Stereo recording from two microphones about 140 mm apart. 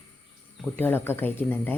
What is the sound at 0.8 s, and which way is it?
Speech, 15° left (ahead or behind).